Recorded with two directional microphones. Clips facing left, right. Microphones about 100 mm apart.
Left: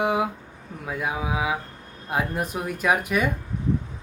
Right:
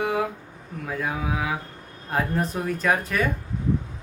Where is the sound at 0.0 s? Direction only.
15° left (ahead or behind).